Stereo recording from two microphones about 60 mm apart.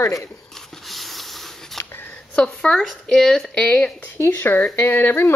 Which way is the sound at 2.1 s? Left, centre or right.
Centre.